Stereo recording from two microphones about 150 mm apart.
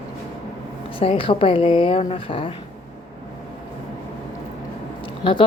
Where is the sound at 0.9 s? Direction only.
40° left (ahead or behind).